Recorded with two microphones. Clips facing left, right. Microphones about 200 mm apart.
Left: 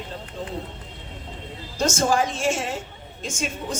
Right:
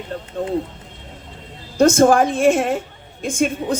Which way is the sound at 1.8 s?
55° right (ahead or behind).